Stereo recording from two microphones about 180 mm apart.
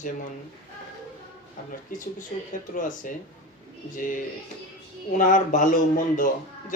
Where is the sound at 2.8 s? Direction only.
45° left (ahead or behind).